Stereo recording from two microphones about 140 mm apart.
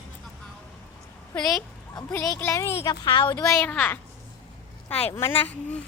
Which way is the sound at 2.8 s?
30° left (ahead or behind).